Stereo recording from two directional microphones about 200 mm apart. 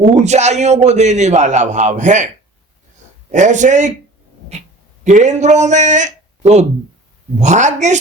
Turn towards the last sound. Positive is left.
turn(degrees=-35)  # may be behind; listen again after turning